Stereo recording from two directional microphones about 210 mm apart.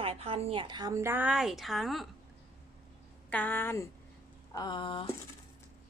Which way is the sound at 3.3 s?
10° left (ahead or behind).